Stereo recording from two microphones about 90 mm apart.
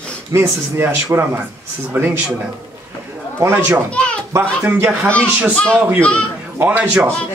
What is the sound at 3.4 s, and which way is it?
Speech, 25° right (ahead or behind).